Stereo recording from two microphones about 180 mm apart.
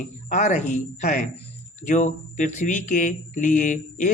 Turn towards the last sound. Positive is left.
turn(degrees=45)  # may be behind; listen again after turning